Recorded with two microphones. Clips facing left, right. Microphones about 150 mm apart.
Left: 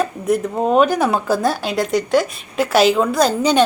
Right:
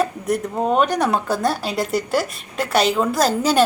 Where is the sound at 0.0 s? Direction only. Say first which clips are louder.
Left 3 dB; centre (ahead or behind).